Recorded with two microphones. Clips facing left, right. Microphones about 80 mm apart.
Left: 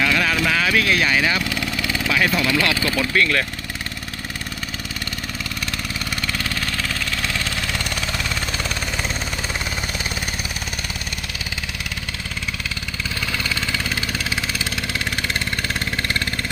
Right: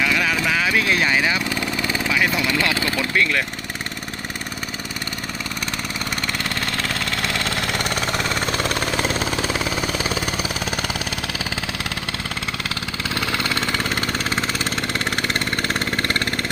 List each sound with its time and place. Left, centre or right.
0.0 s clip-clop: centre
0.4 s speech: centre
1.5 s vehicle: right
2.1 s speech: centre
6.7 s vehicle: right
13.1 s vehicle: right